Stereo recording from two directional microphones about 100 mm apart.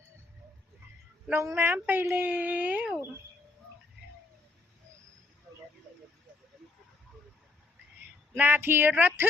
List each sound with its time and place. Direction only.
1.3 s speech: 25° right (ahead or behind)
8.4 s speech: 15° right (ahead or behind)